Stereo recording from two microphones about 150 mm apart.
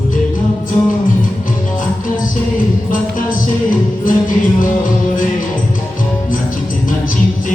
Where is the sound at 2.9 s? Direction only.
65° left (ahead or behind).